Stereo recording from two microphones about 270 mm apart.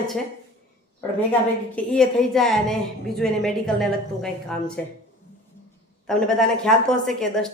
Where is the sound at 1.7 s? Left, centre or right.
Centre.